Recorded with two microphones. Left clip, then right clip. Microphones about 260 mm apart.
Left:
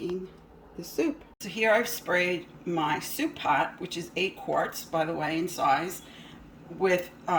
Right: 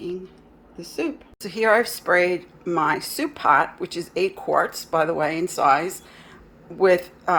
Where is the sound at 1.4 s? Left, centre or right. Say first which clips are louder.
Right 6 dB; right.